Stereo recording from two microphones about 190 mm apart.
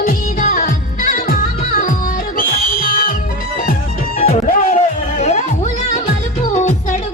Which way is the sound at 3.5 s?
45° left (ahead or behind).